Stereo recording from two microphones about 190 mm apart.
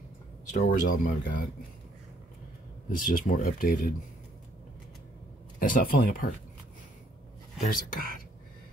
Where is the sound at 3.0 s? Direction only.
45° left (ahead or behind).